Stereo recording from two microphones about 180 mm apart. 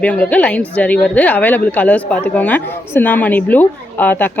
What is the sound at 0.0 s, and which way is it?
A woman's voice, 5° left (ahead or behind).